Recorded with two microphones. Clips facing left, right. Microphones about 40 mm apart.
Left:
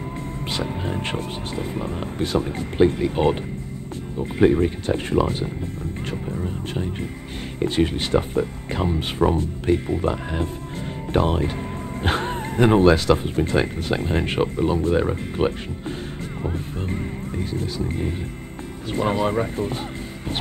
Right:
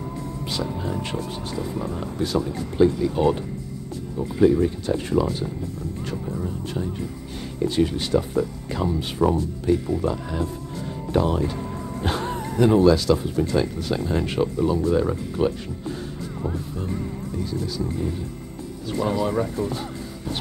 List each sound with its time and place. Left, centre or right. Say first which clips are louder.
0.5 s speech: left 1 dB; left
16.9 s speech: left 1 dB; left